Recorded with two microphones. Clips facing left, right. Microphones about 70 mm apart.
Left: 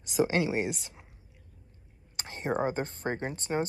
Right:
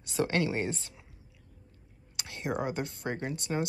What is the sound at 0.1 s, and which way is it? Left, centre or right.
Speech, centre.